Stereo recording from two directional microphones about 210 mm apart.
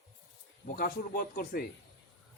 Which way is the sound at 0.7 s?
45° left (ahead or behind).